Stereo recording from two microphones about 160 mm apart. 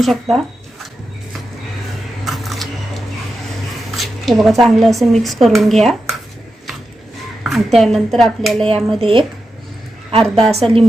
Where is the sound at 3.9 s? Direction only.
Centre (ahead or behind).